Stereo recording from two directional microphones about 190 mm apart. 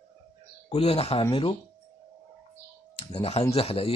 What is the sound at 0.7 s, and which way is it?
Speech, 30° left (ahead or behind).